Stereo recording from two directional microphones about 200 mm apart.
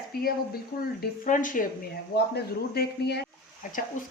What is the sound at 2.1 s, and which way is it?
A man's voice, 50° left (ahead or behind).